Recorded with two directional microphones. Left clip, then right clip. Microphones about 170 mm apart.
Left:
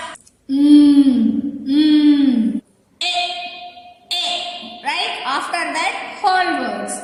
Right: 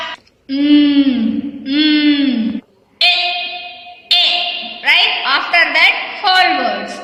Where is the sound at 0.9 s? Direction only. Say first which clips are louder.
Even; 25° right (ahead or behind).